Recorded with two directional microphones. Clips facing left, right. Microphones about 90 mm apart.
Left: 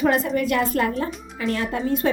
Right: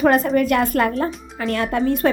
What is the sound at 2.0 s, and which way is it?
Speech, 60° right (ahead or behind).